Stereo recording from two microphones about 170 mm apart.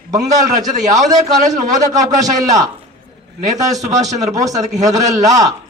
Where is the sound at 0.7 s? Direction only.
45° right (ahead or behind).